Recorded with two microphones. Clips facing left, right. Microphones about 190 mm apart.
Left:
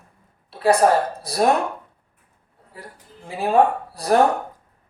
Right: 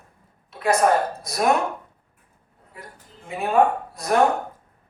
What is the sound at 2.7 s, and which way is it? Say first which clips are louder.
Speech: left 2 dB; 30° left (ahead or behind).